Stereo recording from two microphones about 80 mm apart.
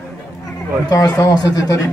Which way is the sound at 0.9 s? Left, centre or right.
Left.